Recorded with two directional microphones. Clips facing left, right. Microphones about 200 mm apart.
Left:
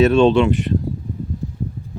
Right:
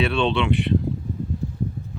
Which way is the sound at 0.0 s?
45° left (ahead or behind).